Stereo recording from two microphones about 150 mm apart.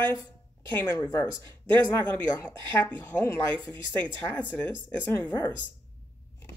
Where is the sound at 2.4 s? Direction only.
15° left (ahead or behind).